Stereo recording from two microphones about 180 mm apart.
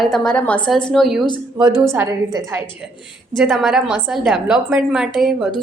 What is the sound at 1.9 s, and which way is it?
Speech, 15° right (ahead or behind).